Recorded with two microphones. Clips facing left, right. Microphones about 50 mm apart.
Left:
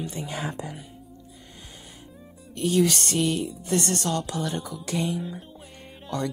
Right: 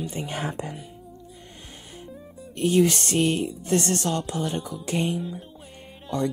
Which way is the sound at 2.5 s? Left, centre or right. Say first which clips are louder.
Right 2 dB; right.